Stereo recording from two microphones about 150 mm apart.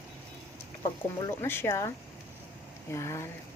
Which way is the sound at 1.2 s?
15° left (ahead or behind).